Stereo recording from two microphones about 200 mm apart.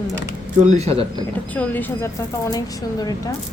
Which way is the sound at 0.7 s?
30° right (ahead or behind).